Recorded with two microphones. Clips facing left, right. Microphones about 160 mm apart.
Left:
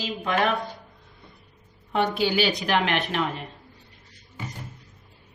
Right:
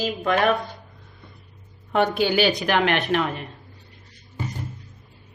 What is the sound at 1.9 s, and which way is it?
A woman's voice, 55° right (ahead or behind).